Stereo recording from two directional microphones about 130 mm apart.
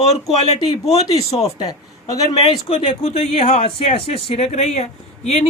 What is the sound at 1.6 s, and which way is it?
Speech, 30° left (ahead or behind).